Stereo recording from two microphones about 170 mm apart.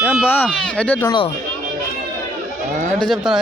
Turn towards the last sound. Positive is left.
turn(degrees=0)  # may be behind; listen again after turning